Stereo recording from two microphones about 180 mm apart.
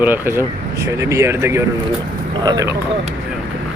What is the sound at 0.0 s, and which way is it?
Speech, 10° right (ahead or behind).